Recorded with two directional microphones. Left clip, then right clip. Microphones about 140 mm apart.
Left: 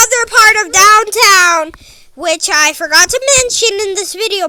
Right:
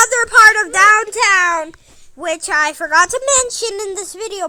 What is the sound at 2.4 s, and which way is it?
A woman's voice, 25° left (ahead or behind).